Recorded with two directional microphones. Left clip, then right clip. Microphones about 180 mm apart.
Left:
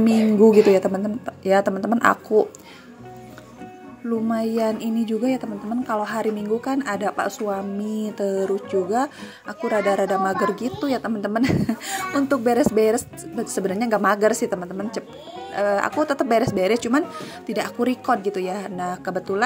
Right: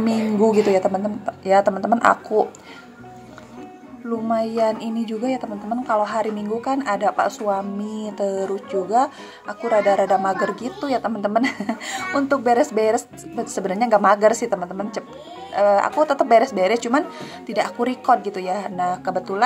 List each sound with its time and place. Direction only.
0.0 s speech: 45° left (ahead or behind)
4.3 s speech: 45° left (ahead or behind)